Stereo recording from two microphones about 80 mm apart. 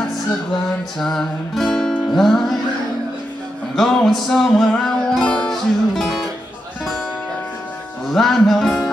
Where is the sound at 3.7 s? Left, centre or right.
Centre.